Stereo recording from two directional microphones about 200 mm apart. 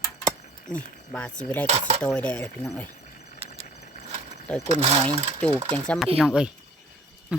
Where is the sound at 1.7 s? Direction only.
30° right (ahead or behind).